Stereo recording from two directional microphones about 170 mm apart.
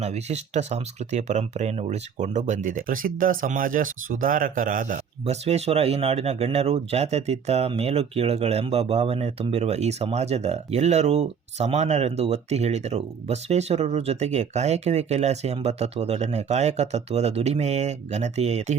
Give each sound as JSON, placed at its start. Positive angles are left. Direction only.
{"t": 0.0, "sound": "speech", "side_deg": -40}